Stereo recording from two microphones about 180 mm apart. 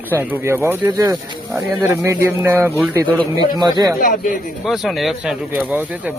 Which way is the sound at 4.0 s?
50° left (ahead or behind).